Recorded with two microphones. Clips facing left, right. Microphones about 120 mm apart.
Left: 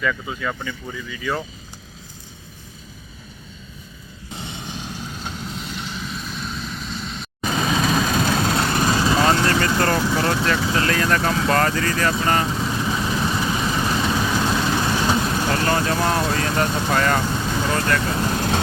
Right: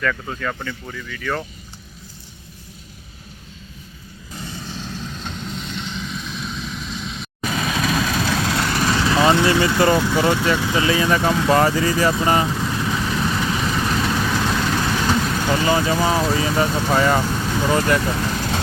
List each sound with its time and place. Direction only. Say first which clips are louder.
0.0 s speech: right 1 dB; 5° left (ahead or behind)
4.3 s vehicle: even; 25° left (ahead or behind); by 7.3 s centre (ahead or behind)
7.5 s vehicle: left 2 dB; 30° left (ahead or behind)
8.9 s vehicle: even; 15° left (ahead or behind)
9.1 s speech: right 5 dB; 10° right (ahead or behind)
12.2 s vehicle: right 2 dB; 10° right (ahead or behind)
15.4 s speech: right 4 dB; 5° right (ahead or behind)